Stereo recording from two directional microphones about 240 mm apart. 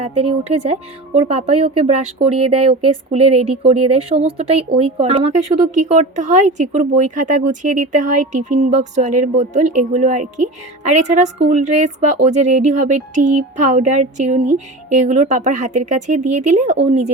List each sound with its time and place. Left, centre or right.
0.0 s speech: right